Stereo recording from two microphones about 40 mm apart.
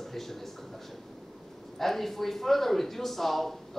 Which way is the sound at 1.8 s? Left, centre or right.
Centre.